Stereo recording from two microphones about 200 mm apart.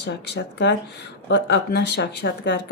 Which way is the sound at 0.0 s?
60° left (ahead or behind).